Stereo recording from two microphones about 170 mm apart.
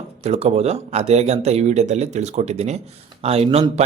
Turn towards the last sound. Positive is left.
turn(degrees=-35)  # may be behind; listen again after turning